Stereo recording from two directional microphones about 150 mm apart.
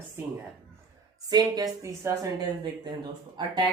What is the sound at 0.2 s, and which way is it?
Speech, 15° right (ahead or behind).